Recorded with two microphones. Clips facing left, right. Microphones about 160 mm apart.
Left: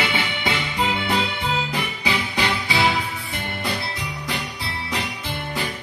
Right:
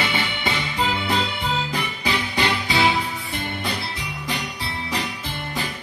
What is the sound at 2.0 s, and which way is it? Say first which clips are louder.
Music: right 1 dB; centre (ahead or behind).